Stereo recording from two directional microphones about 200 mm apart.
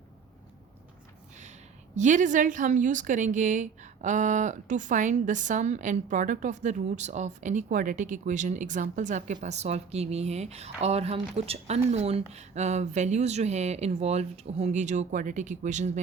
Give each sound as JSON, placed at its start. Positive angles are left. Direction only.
{"t": 2.0, "sound": "a woman's voice", "side_deg": -40}